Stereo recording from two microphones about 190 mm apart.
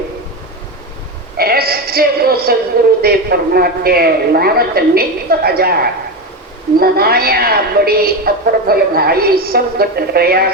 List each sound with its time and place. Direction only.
1.4 s music: 55° right (ahead or behind)
3.0 s a woman's voice: 55° right (ahead or behind)